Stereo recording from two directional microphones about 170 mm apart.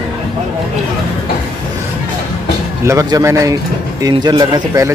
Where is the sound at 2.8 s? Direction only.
20° right (ahead or behind).